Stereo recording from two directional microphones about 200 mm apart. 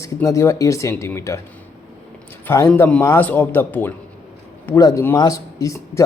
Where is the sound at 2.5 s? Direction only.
15° left (ahead or behind).